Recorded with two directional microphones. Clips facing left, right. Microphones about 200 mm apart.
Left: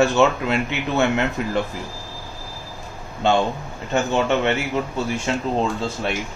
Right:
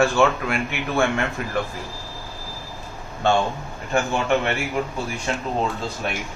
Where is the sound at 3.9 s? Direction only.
20° left (ahead or behind).